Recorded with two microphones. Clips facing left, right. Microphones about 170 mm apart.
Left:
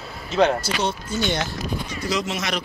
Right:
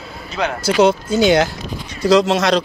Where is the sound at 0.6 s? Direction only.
90° right.